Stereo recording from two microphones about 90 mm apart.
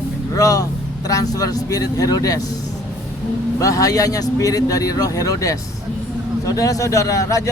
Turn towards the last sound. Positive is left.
turn(degrees=40)  # may be behind; listen again after turning